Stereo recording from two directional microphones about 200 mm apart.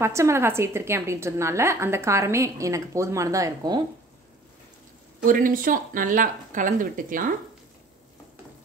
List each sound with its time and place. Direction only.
0.0 s a woman's voice: 15° right (ahead or behind)
5.2 s speech: 45° right (ahead or behind)